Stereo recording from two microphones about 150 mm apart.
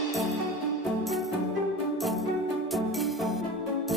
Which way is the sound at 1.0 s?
Centre (ahead or behind).